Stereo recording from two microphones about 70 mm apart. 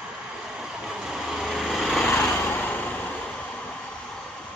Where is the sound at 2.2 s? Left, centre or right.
Left.